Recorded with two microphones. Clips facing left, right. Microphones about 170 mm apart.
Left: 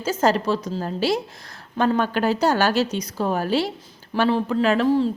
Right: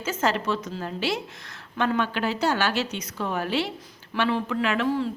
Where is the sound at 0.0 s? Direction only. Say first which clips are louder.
Left 5 dB; 35° left (ahead or behind).